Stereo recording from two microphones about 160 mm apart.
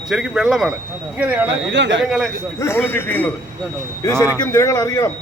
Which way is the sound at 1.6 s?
90° right.